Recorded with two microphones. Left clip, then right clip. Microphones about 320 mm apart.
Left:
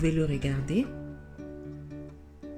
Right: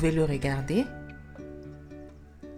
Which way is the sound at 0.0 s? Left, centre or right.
Centre.